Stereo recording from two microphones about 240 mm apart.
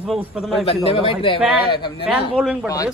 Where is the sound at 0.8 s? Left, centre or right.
Left.